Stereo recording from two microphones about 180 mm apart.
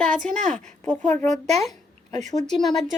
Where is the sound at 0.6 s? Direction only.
40° right (ahead or behind).